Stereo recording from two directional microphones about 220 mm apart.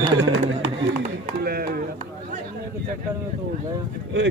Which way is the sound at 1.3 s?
45° right (ahead or behind).